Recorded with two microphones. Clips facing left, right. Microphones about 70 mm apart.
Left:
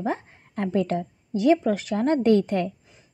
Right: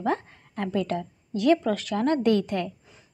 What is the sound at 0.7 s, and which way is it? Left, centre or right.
Speech, left.